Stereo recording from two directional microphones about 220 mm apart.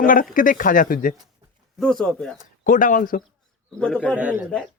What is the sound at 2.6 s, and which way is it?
Speech, 35° left (ahead or behind).